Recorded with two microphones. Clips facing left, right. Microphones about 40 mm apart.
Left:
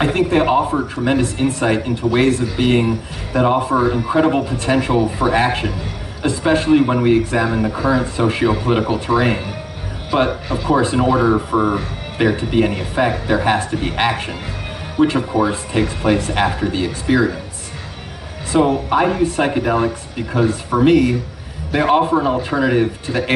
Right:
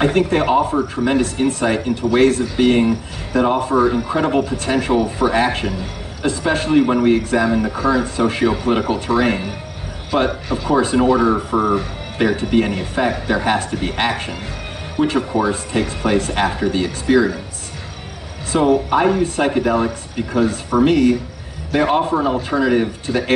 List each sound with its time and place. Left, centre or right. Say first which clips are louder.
0.1 s speech: left 1 dB; centre
1.8 s speech: right 2 dB; centre
18.5 s speech: even; centre